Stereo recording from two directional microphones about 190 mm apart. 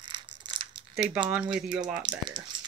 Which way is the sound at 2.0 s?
25° right (ahead or behind).